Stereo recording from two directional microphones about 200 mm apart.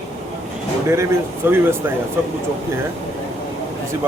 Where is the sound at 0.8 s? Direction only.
15° right (ahead or behind).